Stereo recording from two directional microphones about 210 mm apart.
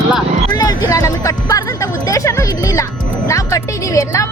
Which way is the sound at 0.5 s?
15° left (ahead or behind).